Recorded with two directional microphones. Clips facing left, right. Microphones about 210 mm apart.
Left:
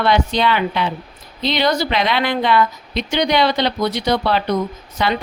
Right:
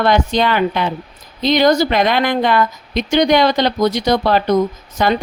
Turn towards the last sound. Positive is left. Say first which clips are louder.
# right 4 dB
turn(degrees=-45)  # may be behind; listen again after turning